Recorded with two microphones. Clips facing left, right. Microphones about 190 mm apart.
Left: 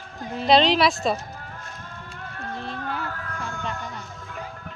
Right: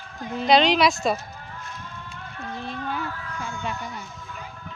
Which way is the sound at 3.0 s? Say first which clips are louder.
Even; 50° left (ahead or behind).